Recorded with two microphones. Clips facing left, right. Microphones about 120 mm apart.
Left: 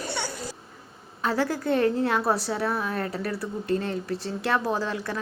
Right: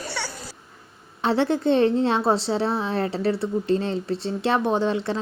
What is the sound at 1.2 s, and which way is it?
A woman's voice, 25° right (ahead or behind).